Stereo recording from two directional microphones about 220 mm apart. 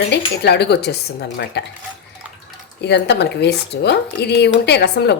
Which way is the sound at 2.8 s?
50° left (ahead or behind).